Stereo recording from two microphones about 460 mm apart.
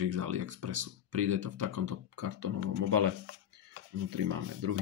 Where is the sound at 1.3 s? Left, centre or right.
Right.